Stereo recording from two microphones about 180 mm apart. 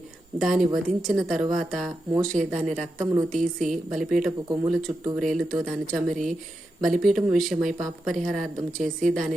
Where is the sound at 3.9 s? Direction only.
Centre (ahead or behind).